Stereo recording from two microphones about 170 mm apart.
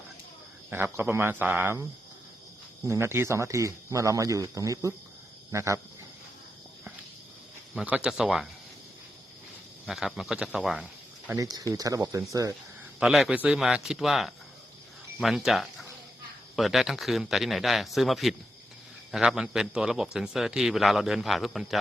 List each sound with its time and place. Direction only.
0.7 s speech: 10° right (ahead or behind)
7.8 s a man's voice: 5° right (ahead or behind)
9.8 s a man's voice: centre (ahead or behind)
11.3 s speech: 20° right (ahead or behind)
13.0 s a man's voice: 5° right (ahead or behind)